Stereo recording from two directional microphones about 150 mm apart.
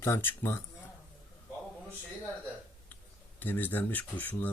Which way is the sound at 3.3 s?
10° left (ahead or behind).